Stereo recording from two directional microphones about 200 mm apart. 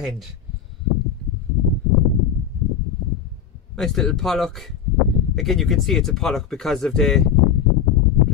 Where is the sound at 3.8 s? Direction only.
Centre (ahead or behind).